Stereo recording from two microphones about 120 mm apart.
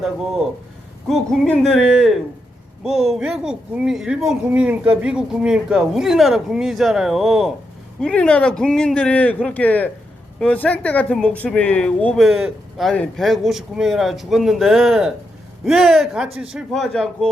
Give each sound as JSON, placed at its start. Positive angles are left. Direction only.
{"t": 0.0, "sound": "speech", "side_deg": -5}
{"t": 16.7, "sound": "speech", "side_deg": 5}